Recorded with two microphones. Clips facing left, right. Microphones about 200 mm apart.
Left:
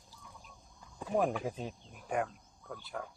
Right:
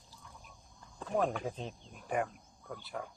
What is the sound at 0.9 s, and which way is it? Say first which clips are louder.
Speech: left 1 dB; 10° left (ahead or behind).